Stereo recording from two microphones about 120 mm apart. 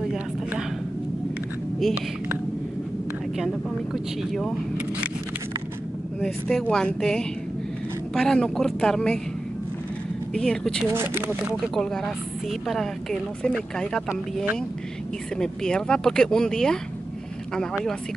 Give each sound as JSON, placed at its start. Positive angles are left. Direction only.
{"t": 0.1, "sound": "a sound", "side_deg": -5}
{"t": 3.9, "sound": "a woman's voice", "side_deg": 0}
{"t": 6.2, "sound": "a woman's voice", "side_deg": 5}
{"t": 10.3, "sound": "speech", "side_deg": 5}
{"t": 10.9, "sound": "speech", "side_deg": -20}
{"t": 11.5, "sound": "a woman's voice", "side_deg": 5}
{"t": 14.0, "sound": "speech", "side_deg": -15}
{"t": 15.3, "sound": "a woman's voice", "side_deg": 5}